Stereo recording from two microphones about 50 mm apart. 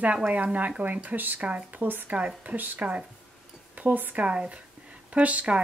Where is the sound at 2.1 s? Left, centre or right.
Right.